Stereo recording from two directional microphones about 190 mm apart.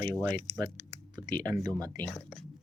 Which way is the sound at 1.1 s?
20° right (ahead or behind).